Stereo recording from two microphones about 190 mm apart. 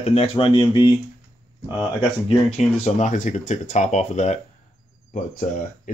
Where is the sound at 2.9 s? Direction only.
40° left (ahead or behind).